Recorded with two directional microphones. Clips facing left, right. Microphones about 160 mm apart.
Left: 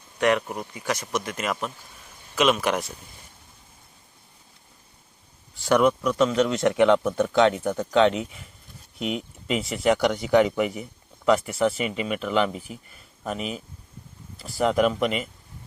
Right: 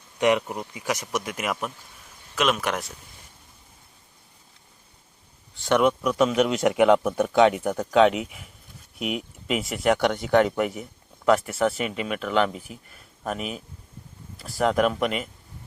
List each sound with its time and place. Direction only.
0.2 s speech: 15° right (ahead or behind)
2.3 s speech: centre (ahead or behind)
5.5 s speech: centre (ahead or behind)